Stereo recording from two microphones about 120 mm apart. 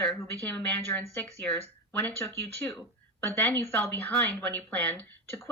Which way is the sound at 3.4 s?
15° left (ahead or behind).